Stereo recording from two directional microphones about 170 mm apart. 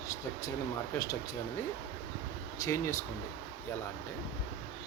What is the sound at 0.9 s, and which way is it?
Speech, 20° left (ahead or behind).